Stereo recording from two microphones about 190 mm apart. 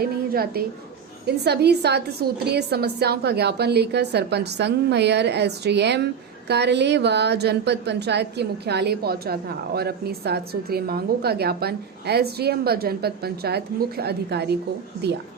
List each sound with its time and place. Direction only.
0.0 s a woman's voice: 55° right (ahead or behind)